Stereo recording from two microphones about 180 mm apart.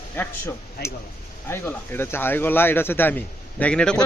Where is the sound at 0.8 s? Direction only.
60° left (ahead or behind).